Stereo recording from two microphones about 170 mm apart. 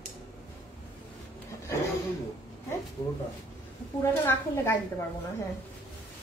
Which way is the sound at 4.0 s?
15° left (ahead or behind).